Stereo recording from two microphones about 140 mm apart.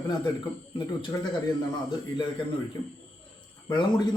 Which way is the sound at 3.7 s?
30° left (ahead or behind).